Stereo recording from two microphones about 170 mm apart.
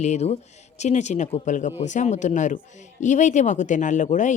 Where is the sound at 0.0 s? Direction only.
40° left (ahead or behind).